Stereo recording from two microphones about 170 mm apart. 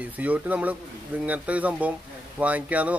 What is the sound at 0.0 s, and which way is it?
Speech, 10° right (ahead or behind).